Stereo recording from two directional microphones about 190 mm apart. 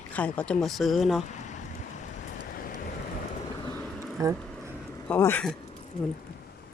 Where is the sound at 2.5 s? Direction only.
50° left (ahead or behind).